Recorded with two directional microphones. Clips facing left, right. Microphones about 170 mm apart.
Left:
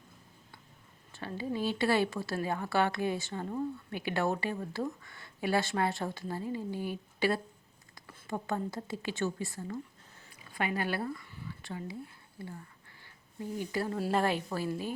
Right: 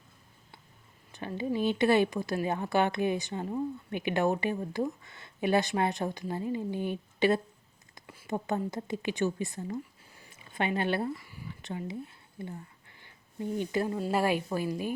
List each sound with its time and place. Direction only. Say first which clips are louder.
1.1 s a woman's voice: right 4 dB; 20° right (ahead or behind)
11.3 s a sound: right 3 dB; 15° right (ahead or behind)
14.1 s a woman's voice: right 2 dB; 10° right (ahead or behind)